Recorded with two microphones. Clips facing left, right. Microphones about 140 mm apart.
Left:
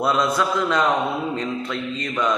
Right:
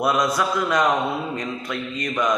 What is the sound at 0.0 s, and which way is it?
A man's voice, 15° right (ahead or behind).